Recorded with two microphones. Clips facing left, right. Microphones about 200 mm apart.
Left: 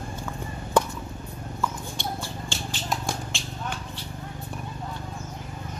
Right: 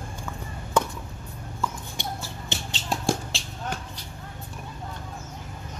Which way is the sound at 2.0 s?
20° right (ahead or behind).